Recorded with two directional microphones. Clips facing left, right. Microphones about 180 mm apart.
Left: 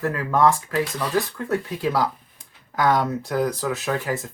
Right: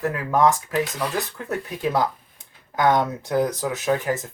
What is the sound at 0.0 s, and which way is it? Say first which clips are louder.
Speech: even; 15° right (ahead or behind).